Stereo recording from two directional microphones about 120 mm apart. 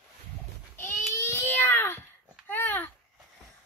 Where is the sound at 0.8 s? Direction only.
15° left (ahead or behind).